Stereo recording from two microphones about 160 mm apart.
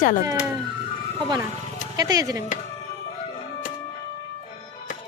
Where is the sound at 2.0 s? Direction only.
25° right (ahead or behind).